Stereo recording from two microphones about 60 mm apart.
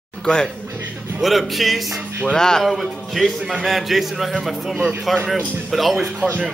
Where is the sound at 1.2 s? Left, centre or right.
Centre.